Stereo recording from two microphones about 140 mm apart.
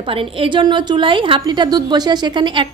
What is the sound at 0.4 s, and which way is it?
A woman's voice, 35° right (ahead or behind).